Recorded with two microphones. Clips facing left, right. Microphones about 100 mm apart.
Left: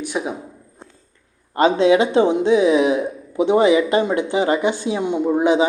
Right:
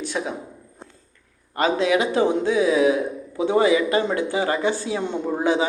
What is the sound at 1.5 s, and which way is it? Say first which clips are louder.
Speech: left 6 dB; 25° left (ahead or behind).